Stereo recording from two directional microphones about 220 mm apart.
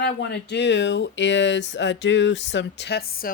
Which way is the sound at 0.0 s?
50° left (ahead or behind).